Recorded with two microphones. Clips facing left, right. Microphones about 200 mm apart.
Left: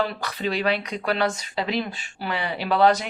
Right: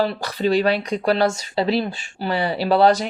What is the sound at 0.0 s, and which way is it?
Speech, 35° right (ahead or behind).